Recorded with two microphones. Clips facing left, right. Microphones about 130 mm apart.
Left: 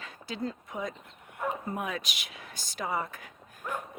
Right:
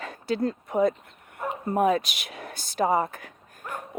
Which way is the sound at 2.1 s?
60° right (ahead or behind).